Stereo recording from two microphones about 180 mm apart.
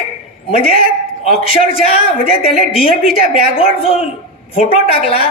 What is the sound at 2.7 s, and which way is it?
Speech, 5° right (ahead or behind).